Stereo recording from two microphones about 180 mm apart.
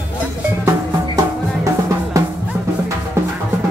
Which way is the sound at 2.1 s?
20° right (ahead or behind).